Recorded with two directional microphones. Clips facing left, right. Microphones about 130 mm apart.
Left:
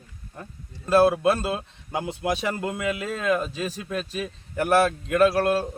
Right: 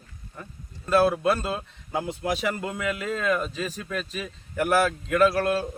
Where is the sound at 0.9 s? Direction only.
35° left (ahead or behind).